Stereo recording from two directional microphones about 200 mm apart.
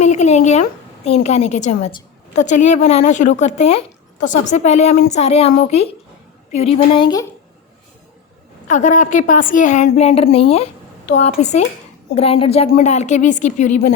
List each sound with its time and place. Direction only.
0.0 s a sound: 35° left (ahead or behind)
1.0 s a woman's voice: 30° left (ahead or behind)
8.6 s a woman's voice: 40° left (ahead or behind)